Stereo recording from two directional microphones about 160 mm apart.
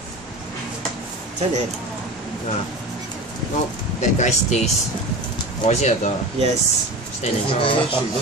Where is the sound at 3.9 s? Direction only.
45° left (ahead or behind).